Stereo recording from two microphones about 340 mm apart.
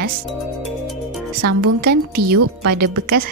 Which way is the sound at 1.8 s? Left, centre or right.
Right.